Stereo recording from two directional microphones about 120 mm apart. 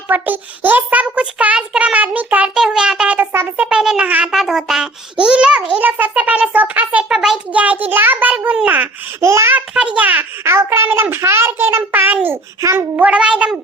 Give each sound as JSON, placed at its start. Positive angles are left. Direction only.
{"t": 0.1, "sound": "a child's voice", "side_deg": -15}
{"t": 13.0, "sound": "a child's voice", "side_deg": -10}